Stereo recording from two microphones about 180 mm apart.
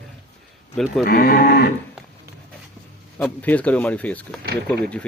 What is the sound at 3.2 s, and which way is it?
Speech, 10° left (ahead or behind).